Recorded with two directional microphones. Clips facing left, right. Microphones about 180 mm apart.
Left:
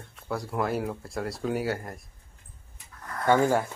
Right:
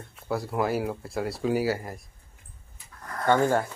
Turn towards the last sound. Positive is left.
turn(degrees=10)  # may be behind; listen again after turning